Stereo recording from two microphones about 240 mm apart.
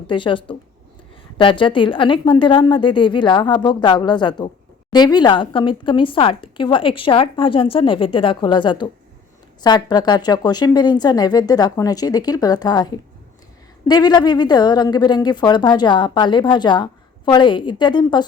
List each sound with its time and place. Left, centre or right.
0.1 s a woman's voice: left